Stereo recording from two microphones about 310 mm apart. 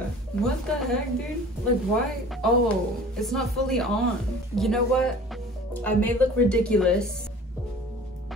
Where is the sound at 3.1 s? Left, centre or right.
Centre.